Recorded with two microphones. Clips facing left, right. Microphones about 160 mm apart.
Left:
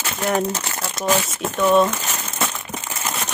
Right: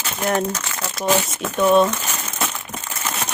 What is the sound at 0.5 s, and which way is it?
Speech, 35° left (ahead or behind).